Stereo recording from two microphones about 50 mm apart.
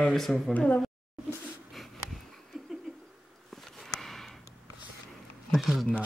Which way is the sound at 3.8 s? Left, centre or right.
Centre.